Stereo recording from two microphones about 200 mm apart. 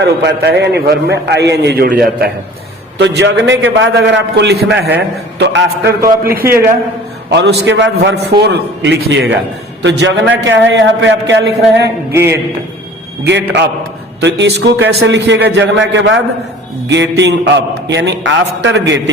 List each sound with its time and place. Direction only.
0.0 s a man's voice: 60° right (ahead or behind)
3.2 s a man's voice: 60° right (ahead or behind)
6.5 s a man's voice: 45° right (ahead or behind)
7.3 s a man's voice: 60° right (ahead or behind)
12.1 s a man's voice: 10° right (ahead or behind)
13.2 s a man's voice: 60° right (ahead or behind)